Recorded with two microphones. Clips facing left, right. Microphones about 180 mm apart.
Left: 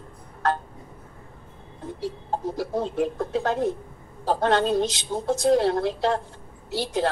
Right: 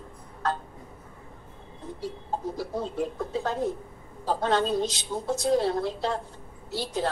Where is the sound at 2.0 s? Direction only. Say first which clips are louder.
Left 3 dB; 80° left.